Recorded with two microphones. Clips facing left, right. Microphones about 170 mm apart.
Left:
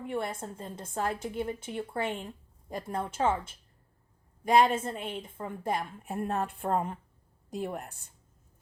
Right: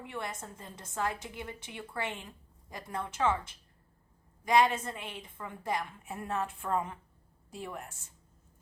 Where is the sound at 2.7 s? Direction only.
30° left (ahead or behind).